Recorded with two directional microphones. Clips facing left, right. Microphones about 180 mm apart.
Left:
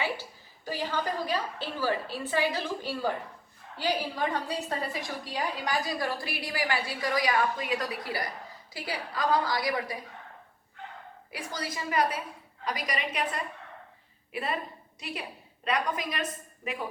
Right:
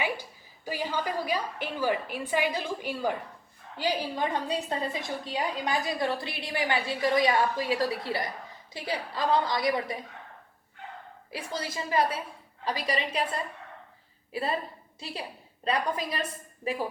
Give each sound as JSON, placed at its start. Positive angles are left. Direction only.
{"t": 0.0, "sound": "a woman's voice", "side_deg": -15}
{"t": 11.3, "sound": "a woman's voice", "side_deg": -25}